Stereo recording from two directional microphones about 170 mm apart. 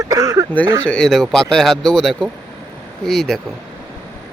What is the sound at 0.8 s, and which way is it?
Speech, 5° left (ahead or behind).